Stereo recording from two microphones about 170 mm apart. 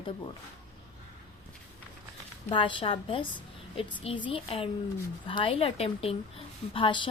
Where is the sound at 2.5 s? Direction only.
30° left (ahead or behind).